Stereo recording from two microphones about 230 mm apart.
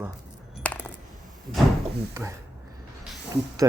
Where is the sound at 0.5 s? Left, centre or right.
Centre.